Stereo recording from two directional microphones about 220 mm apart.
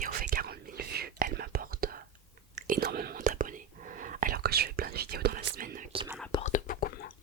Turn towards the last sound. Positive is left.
turn(degrees=40)  # may be behind; listen again after turning